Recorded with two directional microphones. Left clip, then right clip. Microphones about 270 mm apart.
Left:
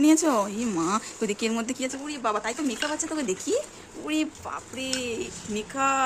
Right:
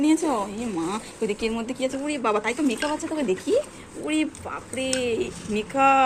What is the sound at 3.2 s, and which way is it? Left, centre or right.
Speech, centre.